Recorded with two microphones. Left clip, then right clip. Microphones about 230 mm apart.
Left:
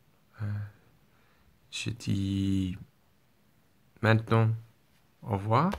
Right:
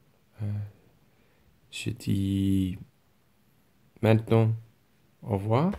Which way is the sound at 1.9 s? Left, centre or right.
Left.